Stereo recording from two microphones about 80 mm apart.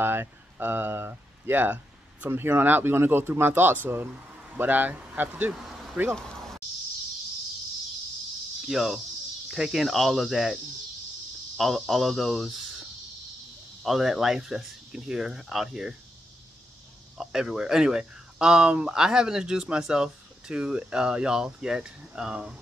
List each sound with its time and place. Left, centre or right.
0.0 s speech: right
4.1 s a sound: centre
4.6 s speech: right
5.5 s vehicle: centre
8.6 s speech: centre
13.8 s speech: centre
17.2 s speech: centre